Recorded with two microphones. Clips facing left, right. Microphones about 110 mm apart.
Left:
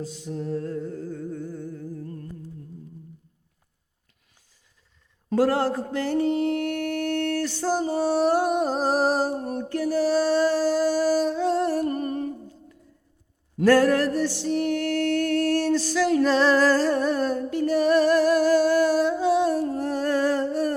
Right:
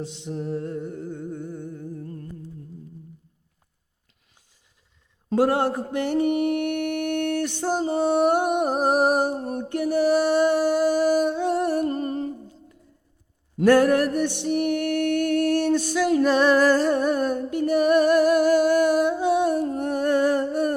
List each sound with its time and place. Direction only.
0.0 s music: 25° right (ahead or behind)
5.3 s mantra: 20° right (ahead or behind)
11.3 s music: 20° right (ahead or behind)
13.6 s mantra: 20° right (ahead or behind)
14.2 s music: 20° right (ahead or behind)
19.6 s humming: 20° right (ahead or behind)